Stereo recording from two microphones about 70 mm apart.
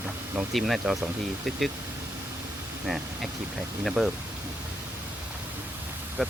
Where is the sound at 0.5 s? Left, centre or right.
Centre.